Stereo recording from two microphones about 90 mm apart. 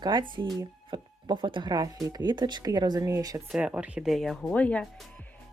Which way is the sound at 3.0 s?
40° right (ahead or behind).